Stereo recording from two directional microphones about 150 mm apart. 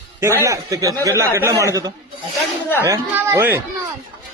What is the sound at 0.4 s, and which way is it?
A man's voice, 20° right (ahead or behind).